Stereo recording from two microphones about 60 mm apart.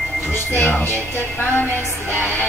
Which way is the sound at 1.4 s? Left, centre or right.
Left.